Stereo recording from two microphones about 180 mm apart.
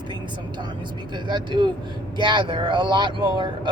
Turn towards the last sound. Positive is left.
turn(degrees=-25)  # may be behind; listen again after turning